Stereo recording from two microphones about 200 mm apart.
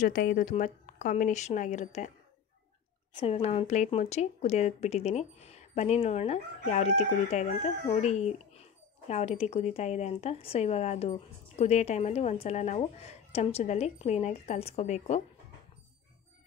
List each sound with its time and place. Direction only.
0.0 s speech: 45° left (ahead or behind)
3.2 s speech: 30° left (ahead or behind)